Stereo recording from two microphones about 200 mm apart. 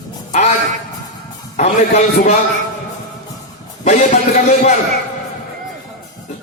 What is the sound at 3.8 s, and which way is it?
Speech, 35° left (ahead or behind).